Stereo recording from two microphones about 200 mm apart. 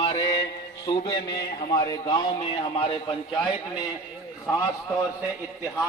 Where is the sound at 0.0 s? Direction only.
20° left (ahead or behind).